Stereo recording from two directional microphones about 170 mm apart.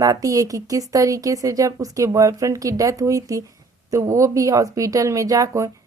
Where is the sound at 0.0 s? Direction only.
20° right (ahead or behind).